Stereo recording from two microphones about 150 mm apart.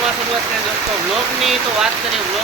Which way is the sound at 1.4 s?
Centre (ahead or behind).